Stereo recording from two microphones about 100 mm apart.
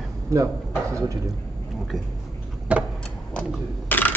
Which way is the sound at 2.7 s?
15° right (ahead or behind).